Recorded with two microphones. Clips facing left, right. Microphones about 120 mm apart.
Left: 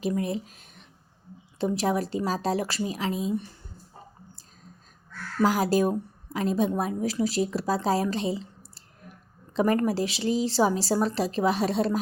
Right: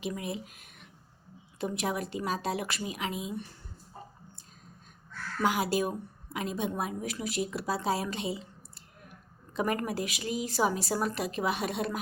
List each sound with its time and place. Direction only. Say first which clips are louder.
0.0 s a woman's voice: left 7 dB; 40° left (ahead or behind)
5.4 s a woman's voice: left 6 dB; 40° left (ahead or behind)